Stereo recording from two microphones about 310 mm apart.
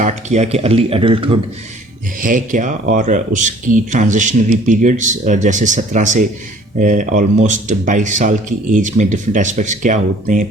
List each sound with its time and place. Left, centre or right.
0.0 s speech: right